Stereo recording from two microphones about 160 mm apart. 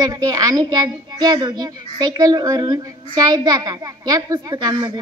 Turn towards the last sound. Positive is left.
turn(degrees=-25)  # may be behind; listen again after turning